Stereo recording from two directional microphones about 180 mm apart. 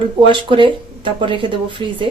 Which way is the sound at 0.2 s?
30° right (ahead or behind).